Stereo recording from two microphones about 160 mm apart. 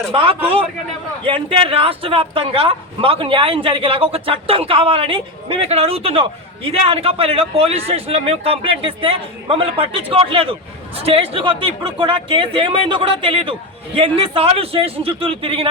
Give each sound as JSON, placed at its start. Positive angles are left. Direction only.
{"t": 0.1, "sound": "speech", "side_deg": -35}